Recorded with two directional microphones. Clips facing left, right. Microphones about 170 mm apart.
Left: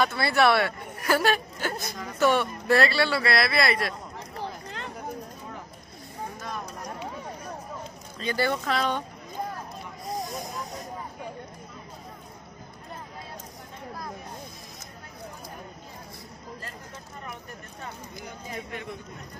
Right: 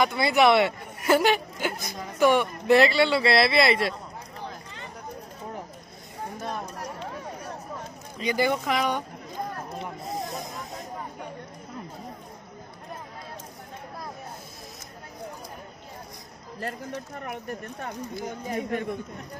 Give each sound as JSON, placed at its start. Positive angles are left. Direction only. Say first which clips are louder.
{"t": 0.0, "sound": "speech", "louder": "right 2 dB", "side_deg": -15}
{"t": 4.6, "sound": "a sound", "louder": "left 4 dB", "side_deg": 70}
{"t": 8.2, "sound": "speech", "louder": "right 2 dB", "side_deg": -15}
{"t": 16.6, "sound": "speech", "louder": "right 9 dB", "side_deg": -60}
{"t": 18.2, "sound": "speech", "louder": "right 7 dB", "side_deg": -45}